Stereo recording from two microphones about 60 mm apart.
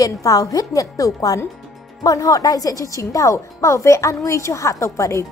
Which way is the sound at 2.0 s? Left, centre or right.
Left.